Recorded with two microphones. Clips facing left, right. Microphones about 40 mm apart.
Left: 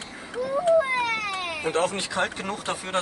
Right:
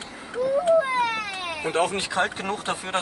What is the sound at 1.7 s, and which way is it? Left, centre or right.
Speech, centre.